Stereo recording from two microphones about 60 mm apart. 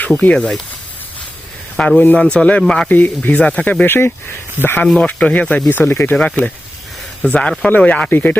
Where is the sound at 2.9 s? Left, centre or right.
Left.